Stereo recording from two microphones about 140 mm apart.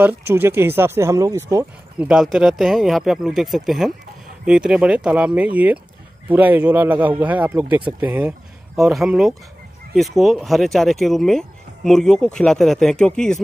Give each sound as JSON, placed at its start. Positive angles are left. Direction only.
{"t": 0.0, "sound": "speech", "side_deg": -15}
{"t": 2.0, "sound": "speech", "side_deg": -5}